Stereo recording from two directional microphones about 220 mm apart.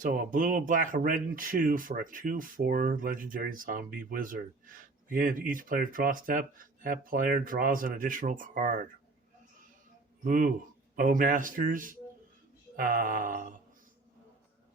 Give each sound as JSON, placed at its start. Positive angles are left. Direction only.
{"t": 0.0, "sound": "speech", "side_deg": -40}
{"t": 10.2, "sound": "speech", "side_deg": -40}